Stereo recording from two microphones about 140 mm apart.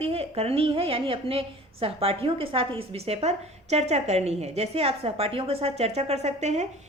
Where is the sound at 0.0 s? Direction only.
45° right (ahead or behind).